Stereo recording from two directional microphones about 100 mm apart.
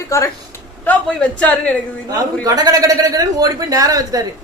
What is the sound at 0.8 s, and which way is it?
A woman's voice, 15° left (ahead or behind).